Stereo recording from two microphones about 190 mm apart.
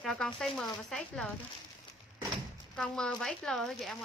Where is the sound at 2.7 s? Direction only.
5° left (ahead or behind).